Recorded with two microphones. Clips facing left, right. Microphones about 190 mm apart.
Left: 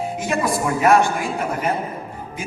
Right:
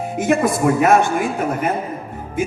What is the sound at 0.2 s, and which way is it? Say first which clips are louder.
Speech: right 7 dB; 55° right (ahead or behind).